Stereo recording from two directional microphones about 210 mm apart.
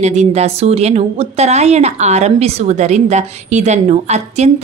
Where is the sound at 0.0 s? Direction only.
30° right (ahead or behind).